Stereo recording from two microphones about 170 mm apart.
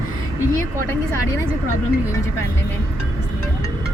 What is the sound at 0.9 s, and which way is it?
Speech, 15° left (ahead or behind).